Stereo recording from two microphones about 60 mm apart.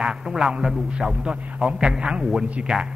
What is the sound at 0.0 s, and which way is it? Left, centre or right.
A man's voice, centre.